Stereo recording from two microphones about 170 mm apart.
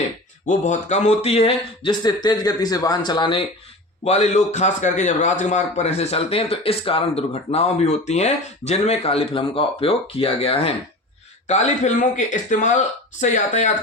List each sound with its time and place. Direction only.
0.4 s speech: 45° left (ahead or behind); by 3.4 s 25° left (ahead or behind)
4.0 s a man's voice: 40° left (ahead or behind)